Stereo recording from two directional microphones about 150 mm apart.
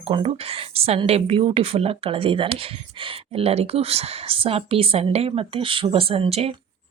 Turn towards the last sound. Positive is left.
turn(degrees=-40)  # may be behind; listen again after turning